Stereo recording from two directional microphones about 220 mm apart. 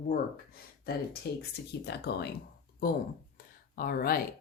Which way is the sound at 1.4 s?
50° left (ahead or behind).